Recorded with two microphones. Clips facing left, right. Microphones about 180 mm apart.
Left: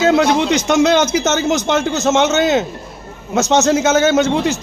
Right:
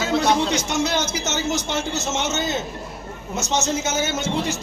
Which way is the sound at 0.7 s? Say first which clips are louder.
Left 10 dB; 90° left.